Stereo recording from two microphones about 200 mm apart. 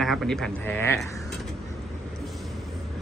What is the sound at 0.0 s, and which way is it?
Speech, centre (ahead or behind).